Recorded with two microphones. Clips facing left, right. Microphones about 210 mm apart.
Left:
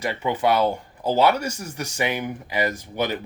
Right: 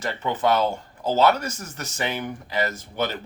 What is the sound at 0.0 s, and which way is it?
Speech, 10° left (ahead or behind).